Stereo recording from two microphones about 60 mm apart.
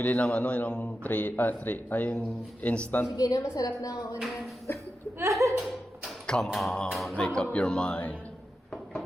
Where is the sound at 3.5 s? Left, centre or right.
Left.